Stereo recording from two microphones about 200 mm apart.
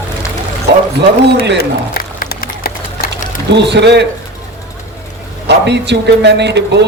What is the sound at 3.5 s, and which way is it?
Speech, 60° right (ahead or behind).